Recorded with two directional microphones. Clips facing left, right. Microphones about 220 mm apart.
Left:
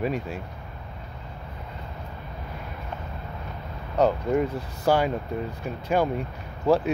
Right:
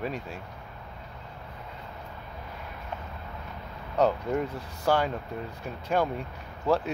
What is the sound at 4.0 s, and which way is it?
Speech, 5° left (ahead or behind).